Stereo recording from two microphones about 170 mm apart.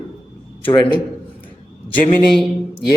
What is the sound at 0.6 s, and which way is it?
Speech, 30° left (ahead or behind).